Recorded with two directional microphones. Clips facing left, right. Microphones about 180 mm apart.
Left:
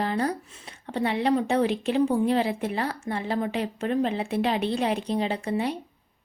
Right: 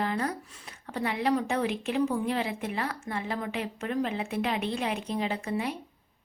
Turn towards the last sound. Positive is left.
turn(degrees=30)  # may be behind; listen again after turning